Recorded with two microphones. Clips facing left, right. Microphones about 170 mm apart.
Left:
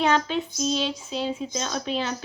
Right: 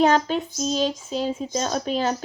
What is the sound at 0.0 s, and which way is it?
A woman's voice, 40° right (ahead or behind).